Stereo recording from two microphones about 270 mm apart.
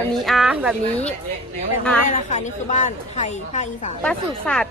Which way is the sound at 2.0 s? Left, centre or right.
Left.